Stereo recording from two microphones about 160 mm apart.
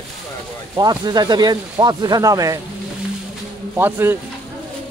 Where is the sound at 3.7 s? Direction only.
15° right (ahead or behind).